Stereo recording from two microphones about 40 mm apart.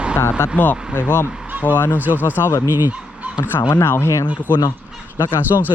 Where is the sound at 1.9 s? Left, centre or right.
Right.